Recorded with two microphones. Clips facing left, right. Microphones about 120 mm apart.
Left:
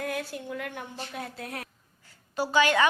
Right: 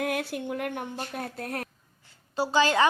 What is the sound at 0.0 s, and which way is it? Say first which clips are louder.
Speech: right 4 dB; 65° right (ahead or behind).